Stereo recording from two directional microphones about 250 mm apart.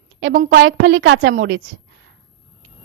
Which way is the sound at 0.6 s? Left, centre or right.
Right.